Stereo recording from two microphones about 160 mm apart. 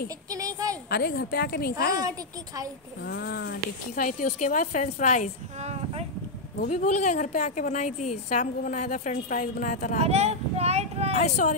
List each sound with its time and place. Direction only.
0.3 s a sound: 20° right (ahead or behind)
0.8 s speech: 75° left (ahead or behind)
2.0 s a woman's voice: 20° right (ahead or behind)
3.0 s speech: 90° left; by 5.3 s 50° left (ahead or behind)
5.6 s a sound: 45° right (ahead or behind)
6.7 s a woman's voice: 45° left (ahead or behind)
9.9 s speech: 40° right (ahead or behind)
11.1 s a woman's voice: 50° left (ahead or behind)